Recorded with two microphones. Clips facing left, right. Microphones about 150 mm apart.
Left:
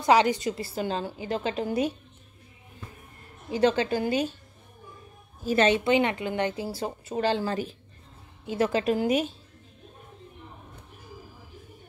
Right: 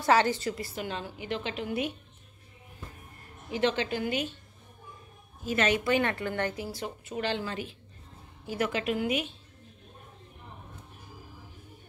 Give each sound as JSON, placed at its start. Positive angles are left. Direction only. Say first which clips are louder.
{"t": 0.0, "sound": "a woman's voice", "louder": "left 3 dB", "side_deg": 15}
{"t": 0.6, "sound": "a woman's voice", "louder": "left 6 dB", "side_deg": 30}
{"t": 3.5, "sound": "a woman's voice", "louder": "left 5 dB", "side_deg": 35}
{"t": 5.4, "sound": "a woman's voice", "louder": "left 5 dB", "side_deg": 35}